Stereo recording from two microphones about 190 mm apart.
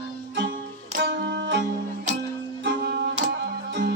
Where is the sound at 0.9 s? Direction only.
65° right (ahead or behind).